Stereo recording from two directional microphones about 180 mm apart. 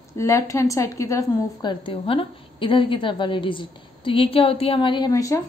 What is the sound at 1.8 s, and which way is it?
Speech, 30° left (ahead or behind).